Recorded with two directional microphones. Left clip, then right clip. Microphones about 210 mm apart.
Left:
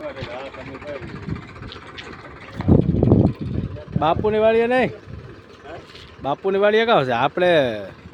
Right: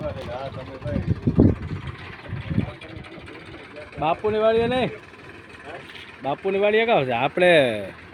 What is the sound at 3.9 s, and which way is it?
Speech, 35° left (ahead or behind).